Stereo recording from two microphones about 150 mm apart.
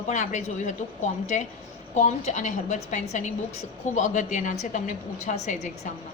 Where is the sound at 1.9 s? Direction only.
50° left (ahead or behind).